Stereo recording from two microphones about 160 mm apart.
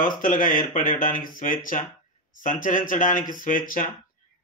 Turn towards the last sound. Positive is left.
turn(degrees=60)  # may be behind; listen again after turning